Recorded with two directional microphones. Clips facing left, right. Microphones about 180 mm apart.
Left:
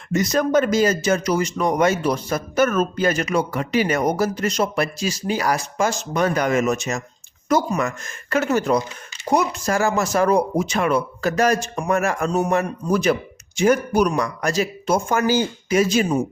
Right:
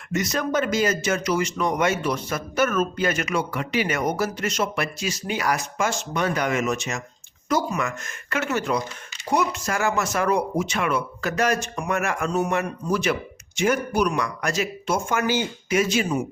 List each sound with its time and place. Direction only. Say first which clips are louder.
0.1 s speech: left 6 dB; 35° left (ahead or behind)